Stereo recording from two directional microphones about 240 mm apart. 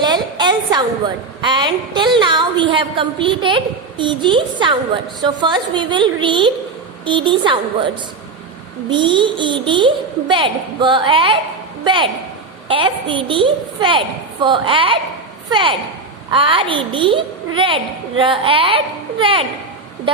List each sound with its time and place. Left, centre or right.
0.0 s a woman's voice: centre
8.9 s a child's voice: centre